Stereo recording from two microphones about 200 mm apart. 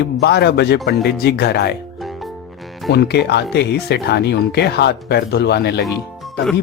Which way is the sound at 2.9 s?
55° left (ahead or behind).